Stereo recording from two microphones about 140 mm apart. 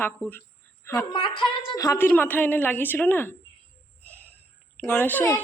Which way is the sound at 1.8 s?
20° left (ahead or behind).